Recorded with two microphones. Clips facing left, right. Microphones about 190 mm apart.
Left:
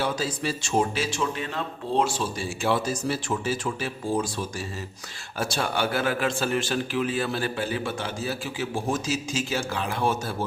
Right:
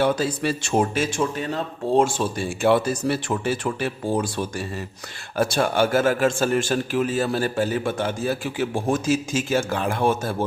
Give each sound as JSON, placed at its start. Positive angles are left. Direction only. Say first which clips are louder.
{"t": 0.0, "sound": "speech", "louder": "right 6 dB", "side_deg": -55}